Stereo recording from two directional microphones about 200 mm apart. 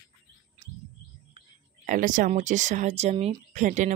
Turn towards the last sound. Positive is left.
turn(degrees=-40)  # may be behind; listen again after turning